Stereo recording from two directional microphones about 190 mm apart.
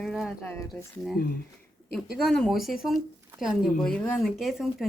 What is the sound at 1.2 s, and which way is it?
Speech, 50° left (ahead or behind).